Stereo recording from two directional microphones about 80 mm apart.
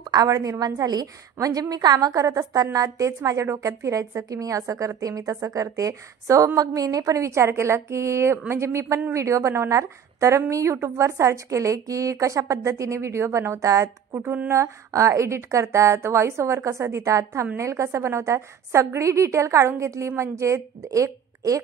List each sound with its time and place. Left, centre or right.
0.0 s a woman's voice: right